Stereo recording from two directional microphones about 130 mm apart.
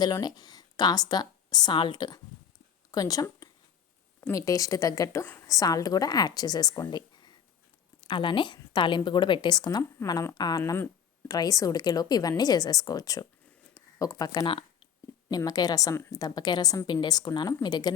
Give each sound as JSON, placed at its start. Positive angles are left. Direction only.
{"t": 0.0, "sound": "a woman's voice", "side_deg": 30}
{"t": 10.6, "sound": "a woman's voice", "side_deg": 20}
{"t": 15.3, "sound": "speech", "side_deg": 30}